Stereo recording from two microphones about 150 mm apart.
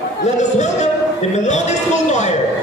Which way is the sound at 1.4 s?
50° left (ahead or behind).